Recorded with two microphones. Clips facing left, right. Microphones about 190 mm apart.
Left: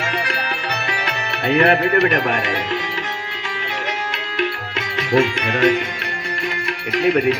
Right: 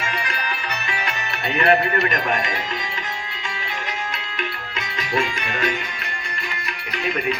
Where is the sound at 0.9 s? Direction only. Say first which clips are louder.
Left 3 dB; 70° left (ahead or behind).